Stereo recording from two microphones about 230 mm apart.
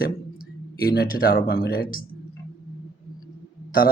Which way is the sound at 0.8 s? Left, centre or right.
Left.